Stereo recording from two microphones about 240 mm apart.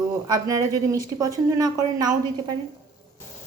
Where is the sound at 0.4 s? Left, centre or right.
Centre.